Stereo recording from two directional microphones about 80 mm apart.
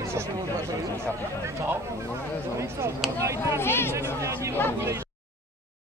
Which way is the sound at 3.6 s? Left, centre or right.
Left.